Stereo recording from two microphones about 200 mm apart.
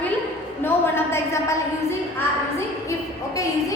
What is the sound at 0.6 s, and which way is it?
A woman's voice, 10° left (ahead or behind).